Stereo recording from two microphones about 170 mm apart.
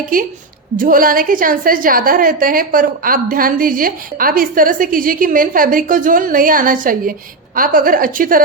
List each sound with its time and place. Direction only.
0.1 s a woman's voice: 55° right (ahead or behind)